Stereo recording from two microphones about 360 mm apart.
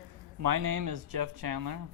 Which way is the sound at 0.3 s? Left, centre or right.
Right.